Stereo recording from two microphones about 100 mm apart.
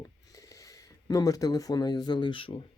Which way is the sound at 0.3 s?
35° left (ahead or behind).